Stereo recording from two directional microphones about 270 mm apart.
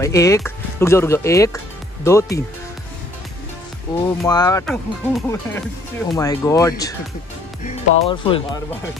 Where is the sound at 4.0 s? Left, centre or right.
Centre.